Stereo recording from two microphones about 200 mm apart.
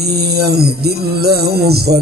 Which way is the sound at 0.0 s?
55° right (ahead or behind).